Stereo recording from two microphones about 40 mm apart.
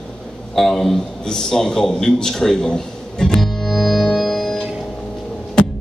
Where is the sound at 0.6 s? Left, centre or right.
Centre.